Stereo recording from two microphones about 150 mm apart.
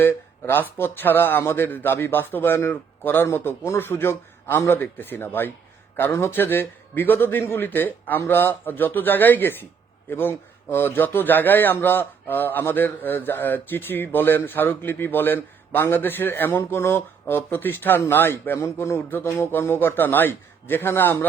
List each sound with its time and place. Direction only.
0.0 s a man's voice: 15° left (ahead or behind)